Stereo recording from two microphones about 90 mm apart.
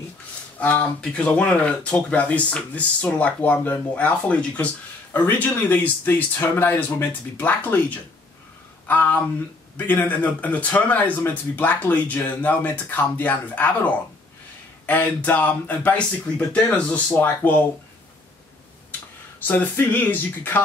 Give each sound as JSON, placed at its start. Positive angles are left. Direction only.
{"t": 0.6, "sound": "a man's voice", "side_deg": 15}
{"t": 19.4, "sound": "speech", "side_deg": 20}